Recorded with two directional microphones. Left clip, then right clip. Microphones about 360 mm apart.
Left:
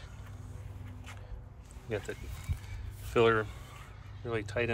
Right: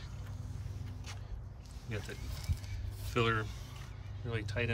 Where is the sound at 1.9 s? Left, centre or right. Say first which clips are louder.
Left 7 dB; centre.